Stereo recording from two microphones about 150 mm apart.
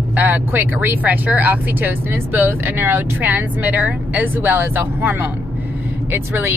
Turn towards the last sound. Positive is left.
turn(degrees=-15)  # may be behind; listen again after turning